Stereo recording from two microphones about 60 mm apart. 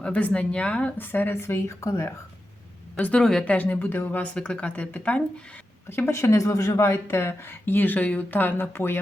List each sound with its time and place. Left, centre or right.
0.0 s speech: left
0.9 s speech: left
1.8 s speech: left
3.2 s a woman's voice: centre
3.4 s speech: left
4.4 s speech: centre
5.9 s speech: left
6.4 s speech: left
7.9 s speech: left